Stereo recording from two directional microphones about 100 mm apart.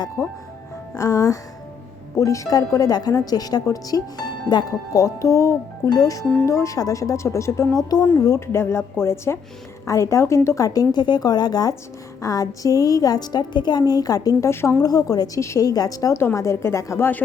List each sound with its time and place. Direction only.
0.2 s a woman's voice: 30° left (ahead or behind)
8.5 s a woman's voice: 25° left (ahead or behind)
14.5 s a woman's voice: 25° left (ahead or behind)
14.8 s a woman's voice: 40° left (ahead or behind)
16.1 s a woman's voice: 25° left (ahead or behind)